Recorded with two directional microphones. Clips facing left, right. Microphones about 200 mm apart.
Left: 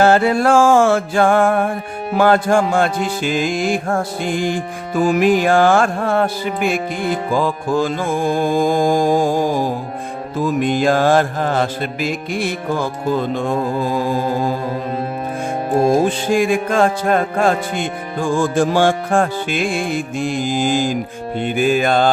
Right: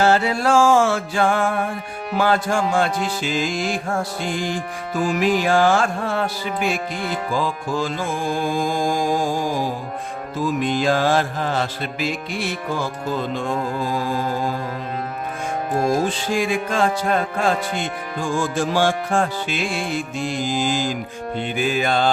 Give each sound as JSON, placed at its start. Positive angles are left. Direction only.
{"t": 0.0, "sound": "music", "side_deg": 50}
{"t": 16.0, "sound": "music", "side_deg": 50}